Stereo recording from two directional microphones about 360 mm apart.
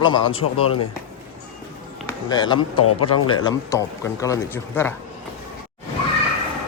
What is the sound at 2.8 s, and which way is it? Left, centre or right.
Speech, left.